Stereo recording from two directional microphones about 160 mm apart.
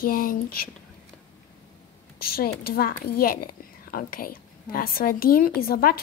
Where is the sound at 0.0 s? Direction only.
60° left (ahead or behind).